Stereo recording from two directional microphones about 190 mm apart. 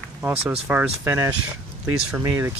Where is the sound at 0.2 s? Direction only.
10° right (ahead or behind).